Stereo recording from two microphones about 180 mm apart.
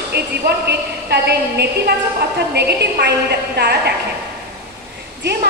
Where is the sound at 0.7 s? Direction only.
65° right (ahead or behind).